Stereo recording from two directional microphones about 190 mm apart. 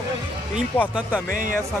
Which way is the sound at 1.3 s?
45° right (ahead or behind).